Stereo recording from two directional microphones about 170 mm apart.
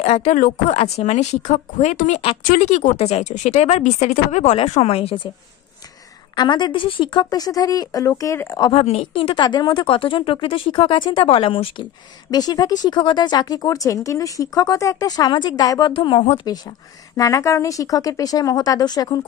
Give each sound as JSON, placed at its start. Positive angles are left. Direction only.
{"t": 0.0, "sound": "speech", "side_deg": 40}
{"t": 6.3, "sound": "speech", "side_deg": 25}
{"t": 8.7, "sound": "speech", "side_deg": 35}
{"t": 17.2, "sound": "speech", "side_deg": 20}